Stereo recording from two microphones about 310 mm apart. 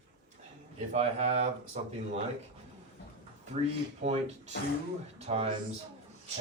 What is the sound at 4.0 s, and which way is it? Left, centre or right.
Speech, right.